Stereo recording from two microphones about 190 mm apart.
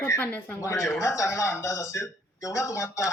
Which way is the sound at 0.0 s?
10° left (ahead or behind).